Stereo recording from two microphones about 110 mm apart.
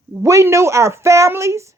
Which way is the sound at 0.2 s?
25° right (ahead or behind).